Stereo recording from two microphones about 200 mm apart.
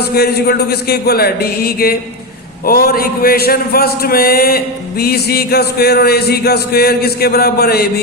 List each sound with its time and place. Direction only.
0.0 s a man's voice: 50° left (ahead or behind)